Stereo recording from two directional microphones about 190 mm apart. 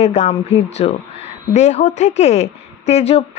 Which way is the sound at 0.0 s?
35° left (ahead or behind).